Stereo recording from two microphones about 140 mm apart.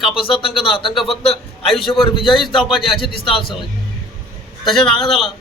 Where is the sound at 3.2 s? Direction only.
40° left (ahead or behind).